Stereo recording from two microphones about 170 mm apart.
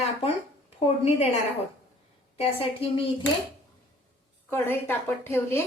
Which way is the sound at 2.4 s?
35° left (ahead or behind).